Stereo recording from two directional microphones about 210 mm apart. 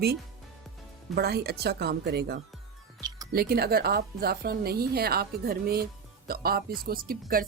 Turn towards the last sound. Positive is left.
turn(degrees=-45)  # may be behind; listen again after turning